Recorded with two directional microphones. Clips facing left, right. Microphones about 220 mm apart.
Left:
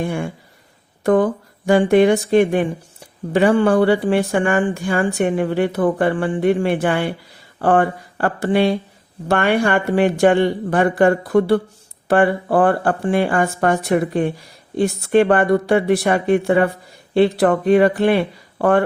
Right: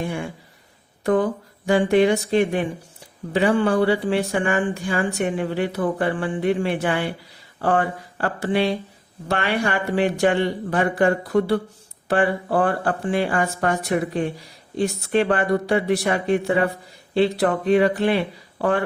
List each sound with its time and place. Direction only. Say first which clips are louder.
0.0 s speech: left 4 dB; 50° left (ahead or behind)